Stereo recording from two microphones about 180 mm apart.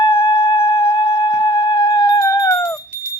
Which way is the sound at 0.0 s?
30° left (ahead or behind).